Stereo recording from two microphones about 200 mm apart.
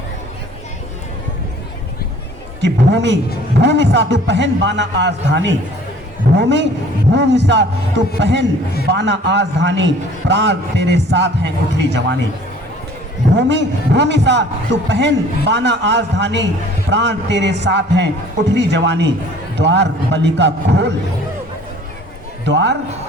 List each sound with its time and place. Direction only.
2.6 s a man's voice: 60° right (ahead or behind)
13.3 s a man's voice: 60° right (ahead or behind)
22.4 s a man's voice: 60° right (ahead or behind)